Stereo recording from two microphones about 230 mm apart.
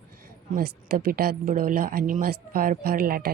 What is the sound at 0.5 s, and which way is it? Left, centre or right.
Speech, right.